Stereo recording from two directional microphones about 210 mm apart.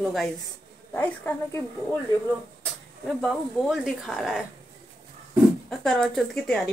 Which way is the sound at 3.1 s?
Centre (ahead or behind).